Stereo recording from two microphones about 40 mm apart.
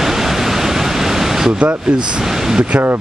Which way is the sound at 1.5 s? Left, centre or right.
Right.